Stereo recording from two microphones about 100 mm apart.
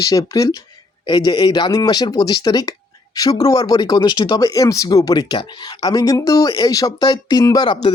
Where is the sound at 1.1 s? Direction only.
50° left (ahead or behind).